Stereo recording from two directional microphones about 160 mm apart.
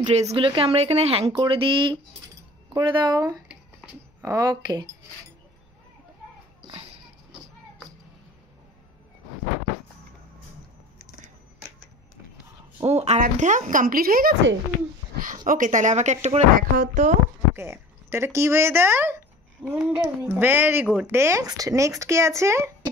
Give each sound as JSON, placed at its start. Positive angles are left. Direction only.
{"t": 0.1, "sound": "speech", "side_deg": -40}
{"t": 12.8, "sound": "a woman's voice", "side_deg": -40}
{"t": 16.5, "sound": "a woman's voice", "side_deg": -60}
{"t": 17.6, "sound": "speech", "side_deg": -15}